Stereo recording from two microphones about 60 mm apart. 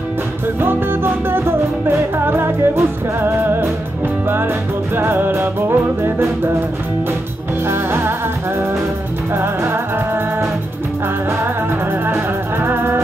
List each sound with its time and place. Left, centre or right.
0.6 s music: right
4.9 s music: right
7.6 s music: right
9.3 s music: right
12.6 s music: right